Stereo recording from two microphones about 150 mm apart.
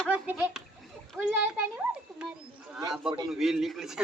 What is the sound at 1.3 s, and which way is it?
Speech, 10° right (ahead or behind).